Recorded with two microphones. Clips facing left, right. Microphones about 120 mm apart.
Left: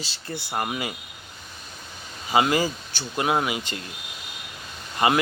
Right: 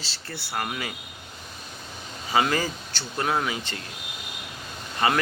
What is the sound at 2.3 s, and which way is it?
A man's voice, 15° left (ahead or behind).